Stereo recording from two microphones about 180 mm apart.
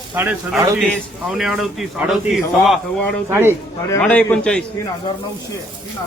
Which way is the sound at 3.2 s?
15° right (ahead or behind).